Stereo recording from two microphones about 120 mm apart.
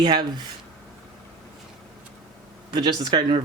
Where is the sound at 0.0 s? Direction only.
40° right (ahead or behind).